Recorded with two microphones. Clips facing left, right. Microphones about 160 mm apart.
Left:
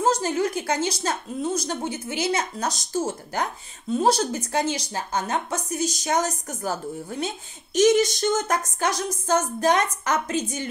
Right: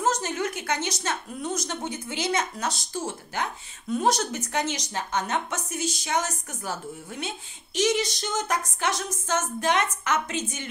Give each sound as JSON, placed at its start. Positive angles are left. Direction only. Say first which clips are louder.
{"t": 0.0, "sound": "a woman's voice", "louder": "left 4 dB", "side_deg": 30}
{"t": 3.9, "sound": "a woman's voice", "louder": "left 3 dB", "side_deg": 30}